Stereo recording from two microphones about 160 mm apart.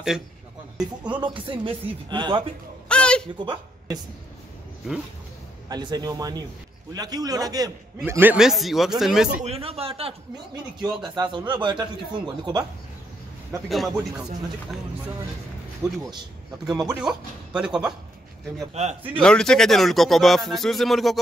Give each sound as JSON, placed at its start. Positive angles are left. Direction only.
{"t": 0.7, "sound": "music", "side_deg": -10}
{"t": 1.2, "sound": "speech", "side_deg": -35}
{"t": 2.9, "sound": "a sound", "side_deg": 5}
{"t": 5.7, "sound": "speech", "side_deg": -25}
{"t": 8.0, "sound": "speech", "side_deg": -10}
{"t": 9.4, "sound": "speech", "side_deg": -40}
{"t": 10.8, "sound": "speech", "side_deg": -25}
{"t": 13.7, "sound": "speech", "side_deg": 0}
{"t": 15.8, "sound": "speech", "side_deg": -20}
{"t": 17.0, "sound": "speech", "side_deg": -5}
{"t": 18.8, "sound": "a man's voice", "side_deg": -45}
{"t": 19.2, "sound": "speech", "side_deg": 5}